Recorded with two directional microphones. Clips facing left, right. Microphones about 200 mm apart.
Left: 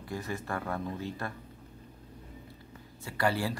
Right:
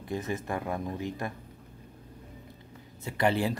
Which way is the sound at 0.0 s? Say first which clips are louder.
Right 4 dB; 20° right (ahead or behind).